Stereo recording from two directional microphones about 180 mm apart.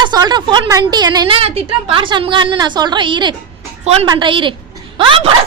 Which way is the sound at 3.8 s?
35° right (ahead or behind).